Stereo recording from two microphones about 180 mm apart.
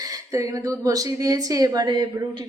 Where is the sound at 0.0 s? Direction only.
20° right (ahead or behind).